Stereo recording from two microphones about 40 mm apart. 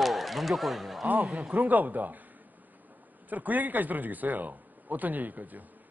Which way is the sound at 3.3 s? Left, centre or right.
Right.